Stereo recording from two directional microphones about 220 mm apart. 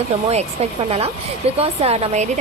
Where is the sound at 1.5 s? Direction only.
25° right (ahead or behind).